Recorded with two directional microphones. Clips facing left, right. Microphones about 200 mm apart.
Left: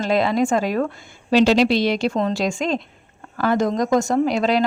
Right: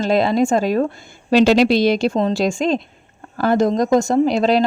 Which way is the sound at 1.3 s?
50° right (ahead or behind).